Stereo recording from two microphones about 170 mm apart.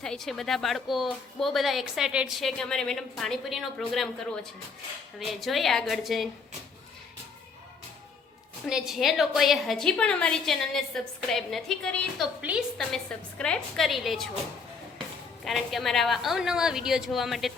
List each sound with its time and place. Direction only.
0.0 s a woman's voice: centre (ahead or behind)
8.6 s a woman's voice: centre (ahead or behind)
15.4 s a woman's voice: centre (ahead or behind)